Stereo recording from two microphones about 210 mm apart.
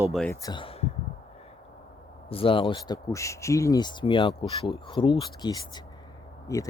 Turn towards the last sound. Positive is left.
turn(degrees=15)  # may be behind; listen again after turning